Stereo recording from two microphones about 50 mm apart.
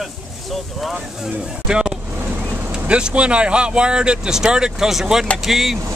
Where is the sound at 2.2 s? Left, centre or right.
Right.